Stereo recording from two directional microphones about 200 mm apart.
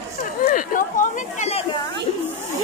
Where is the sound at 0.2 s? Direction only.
40° left (ahead or behind).